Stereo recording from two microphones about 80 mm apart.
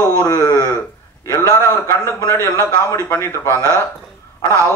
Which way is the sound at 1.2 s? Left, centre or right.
Left.